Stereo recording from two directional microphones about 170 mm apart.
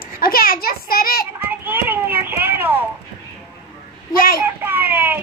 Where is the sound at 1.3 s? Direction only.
10° right (ahead or behind).